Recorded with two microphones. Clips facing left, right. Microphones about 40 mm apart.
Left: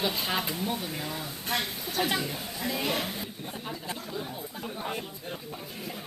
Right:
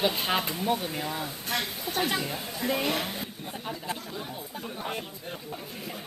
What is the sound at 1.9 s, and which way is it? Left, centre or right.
Speech, right.